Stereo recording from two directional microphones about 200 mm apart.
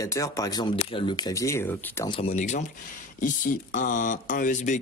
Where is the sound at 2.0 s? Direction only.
30° left (ahead or behind).